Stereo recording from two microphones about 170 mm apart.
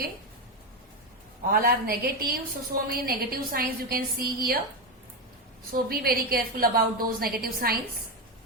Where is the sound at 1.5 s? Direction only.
60° right (ahead or behind).